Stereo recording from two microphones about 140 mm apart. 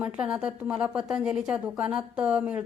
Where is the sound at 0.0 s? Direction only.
5° right (ahead or behind).